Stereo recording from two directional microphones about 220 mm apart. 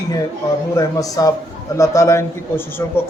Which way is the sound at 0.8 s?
15° left (ahead or behind).